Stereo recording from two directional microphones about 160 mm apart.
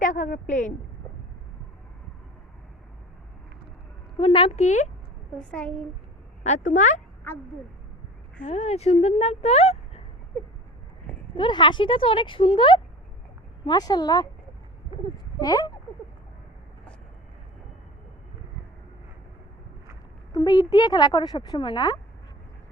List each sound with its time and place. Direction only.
0.0 s a sound: 55° left (ahead or behind)
4.2 s speech: 35° left (ahead or behind)
5.4 s a child's voice: 5° left (ahead or behind)
6.4 s speech: 50° left (ahead or behind)
8.4 s speech: 45° left (ahead or behind)
11.3 s speech: 30° left (ahead or behind)
20.3 s speech: 25° left (ahead or behind)